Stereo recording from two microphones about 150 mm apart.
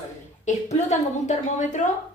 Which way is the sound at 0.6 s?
50° left (ahead or behind).